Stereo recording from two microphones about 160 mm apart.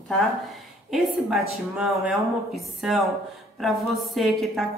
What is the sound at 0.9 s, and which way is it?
A woman's voice, centre (ahead or behind).